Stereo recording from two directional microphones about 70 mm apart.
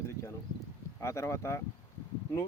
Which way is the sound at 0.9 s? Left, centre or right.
Left.